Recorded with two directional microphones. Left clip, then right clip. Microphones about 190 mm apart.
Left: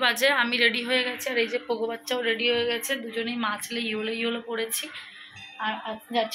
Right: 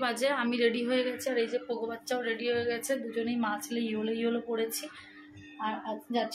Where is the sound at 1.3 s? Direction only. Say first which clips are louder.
Left 4 dB; 15° left (ahead or behind).